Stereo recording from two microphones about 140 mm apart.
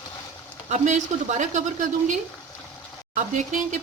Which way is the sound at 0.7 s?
60° right (ahead or behind).